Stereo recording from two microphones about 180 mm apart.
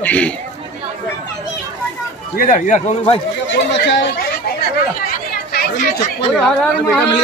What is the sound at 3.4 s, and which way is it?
Speech, 85° left.